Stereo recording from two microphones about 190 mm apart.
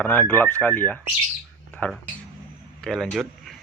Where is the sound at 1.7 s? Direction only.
5° left (ahead or behind).